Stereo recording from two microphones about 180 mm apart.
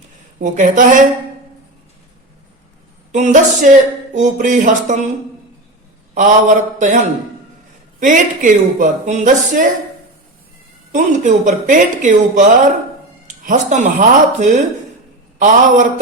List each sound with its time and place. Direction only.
0.3 s speech: 45° right (ahead or behind)
3.1 s speech: 40° right (ahead or behind)
6.1 s speech: 45° right (ahead or behind)
10.9 s speech: 45° right (ahead or behind)